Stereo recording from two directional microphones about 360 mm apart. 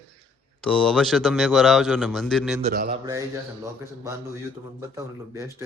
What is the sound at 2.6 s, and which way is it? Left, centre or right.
Mantra, centre.